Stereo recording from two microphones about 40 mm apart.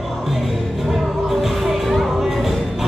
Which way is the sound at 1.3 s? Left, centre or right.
Centre.